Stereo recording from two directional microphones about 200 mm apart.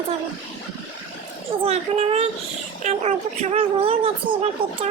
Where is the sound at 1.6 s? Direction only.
30° right (ahead or behind).